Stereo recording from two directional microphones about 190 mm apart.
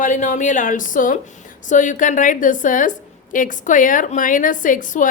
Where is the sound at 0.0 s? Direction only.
40° left (ahead or behind).